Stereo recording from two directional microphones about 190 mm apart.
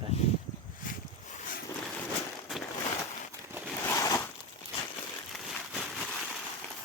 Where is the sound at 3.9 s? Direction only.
15° left (ahead or behind).